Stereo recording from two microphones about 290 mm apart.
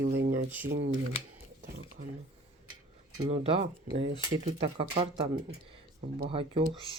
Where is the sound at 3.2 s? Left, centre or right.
Centre.